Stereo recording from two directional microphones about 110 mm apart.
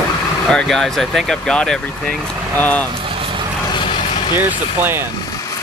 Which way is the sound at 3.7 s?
50° left (ahead or behind).